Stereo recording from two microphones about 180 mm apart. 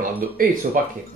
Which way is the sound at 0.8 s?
50° right (ahead or behind).